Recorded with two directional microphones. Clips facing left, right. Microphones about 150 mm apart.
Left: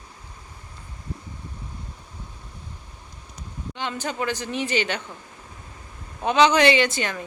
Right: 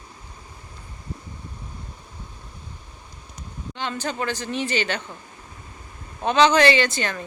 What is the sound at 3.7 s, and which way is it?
A woman's voice, 15° left (ahead or behind).